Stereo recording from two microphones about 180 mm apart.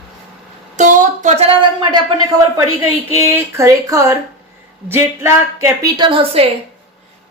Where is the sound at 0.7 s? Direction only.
40° right (ahead or behind).